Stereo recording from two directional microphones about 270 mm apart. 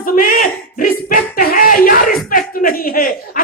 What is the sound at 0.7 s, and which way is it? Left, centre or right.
Music, left.